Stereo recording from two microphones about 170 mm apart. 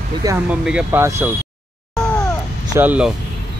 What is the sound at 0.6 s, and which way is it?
Speech, 10° right (ahead or behind).